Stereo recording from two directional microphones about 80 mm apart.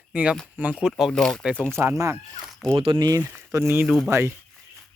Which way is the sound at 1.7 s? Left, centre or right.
Right.